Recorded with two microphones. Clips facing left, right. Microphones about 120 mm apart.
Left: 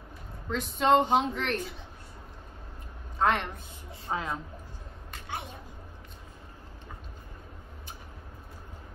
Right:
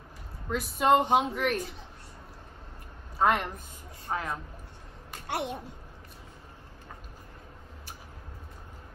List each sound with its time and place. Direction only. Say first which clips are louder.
0.5 s a woman's voice: even; 5° right (ahead or behind)
3.2 s a woman's voice: right 1 dB; 5° right (ahead or behind)
4.1 s a woman's voice: even; 20° left (ahead or behind)
5.3 s a child's voice: right 7 dB; 75° right (ahead or behind)